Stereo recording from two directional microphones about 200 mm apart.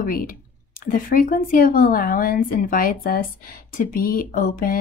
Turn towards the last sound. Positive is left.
turn(degrees=45)  # may be behind; listen again after turning